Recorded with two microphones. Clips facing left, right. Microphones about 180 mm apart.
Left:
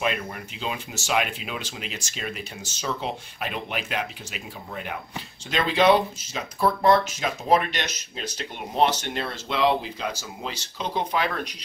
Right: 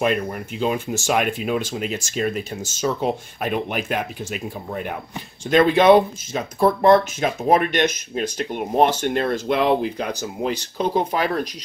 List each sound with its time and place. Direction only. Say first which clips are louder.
0.0 s speech: right 6 dB; 45° right (ahead or behind)